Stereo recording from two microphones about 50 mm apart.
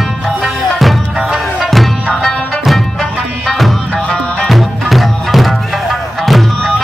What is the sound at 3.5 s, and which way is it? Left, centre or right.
Music, centre.